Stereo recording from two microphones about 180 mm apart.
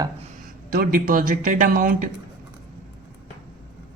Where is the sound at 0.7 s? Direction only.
50° right (ahead or behind).